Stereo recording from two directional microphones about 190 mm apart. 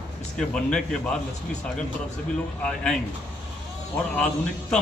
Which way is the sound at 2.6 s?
5° left (ahead or behind).